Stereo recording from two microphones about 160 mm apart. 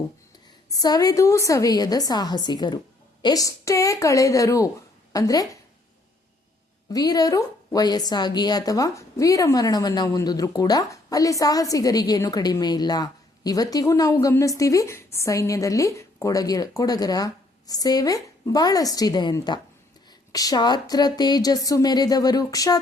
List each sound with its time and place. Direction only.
0.7 s a woman's voice: 25° left (ahead or behind)
6.9 s a woman's voice: 25° left (ahead or behind)